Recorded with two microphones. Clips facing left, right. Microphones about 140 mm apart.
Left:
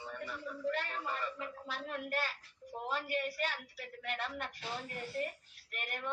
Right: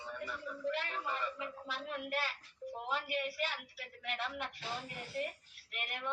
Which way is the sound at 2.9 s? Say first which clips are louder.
Left 1 dB; 40° left (ahead or behind).